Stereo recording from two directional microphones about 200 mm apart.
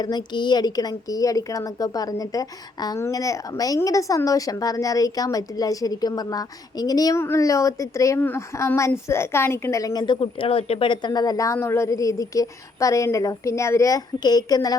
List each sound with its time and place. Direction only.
0.0 s a woman's voice: 20° left (ahead or behind)